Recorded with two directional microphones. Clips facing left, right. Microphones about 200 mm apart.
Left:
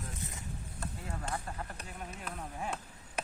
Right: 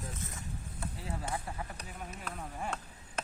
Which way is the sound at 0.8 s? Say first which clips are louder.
Right 1 dB; 10° right (ahead or behind).